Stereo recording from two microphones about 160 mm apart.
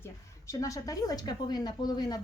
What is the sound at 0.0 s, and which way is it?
A woman's voice, 20° left (ahead or behind).